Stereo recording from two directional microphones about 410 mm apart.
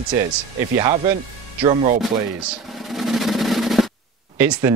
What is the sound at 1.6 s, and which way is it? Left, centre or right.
Speech, centre.